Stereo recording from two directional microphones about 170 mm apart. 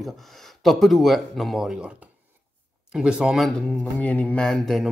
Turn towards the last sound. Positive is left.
turn(degrees=0)  # may be behind; listen again after turning